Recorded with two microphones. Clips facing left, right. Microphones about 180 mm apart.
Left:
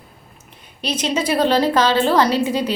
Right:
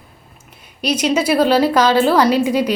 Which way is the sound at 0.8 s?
10° right (ahead or behind).